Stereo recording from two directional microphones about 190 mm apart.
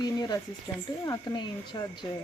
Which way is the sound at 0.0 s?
20° left (ahead or behind).